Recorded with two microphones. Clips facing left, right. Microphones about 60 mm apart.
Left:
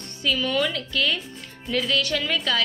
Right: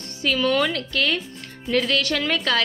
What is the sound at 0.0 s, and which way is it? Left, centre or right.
A woman's voice, right.